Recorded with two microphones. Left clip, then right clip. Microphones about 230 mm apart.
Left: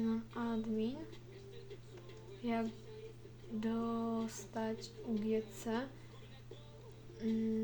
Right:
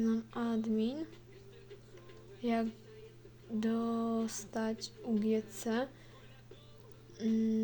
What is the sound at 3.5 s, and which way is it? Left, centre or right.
Speech, right.